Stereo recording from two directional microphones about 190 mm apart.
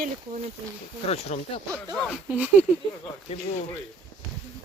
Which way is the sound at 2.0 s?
10° right (ahead or behind).